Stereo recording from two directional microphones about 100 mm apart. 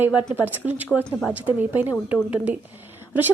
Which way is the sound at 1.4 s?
20° right (ahead or behind).